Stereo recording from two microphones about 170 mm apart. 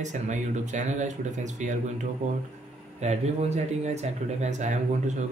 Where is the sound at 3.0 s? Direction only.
40° right (ahead or behind).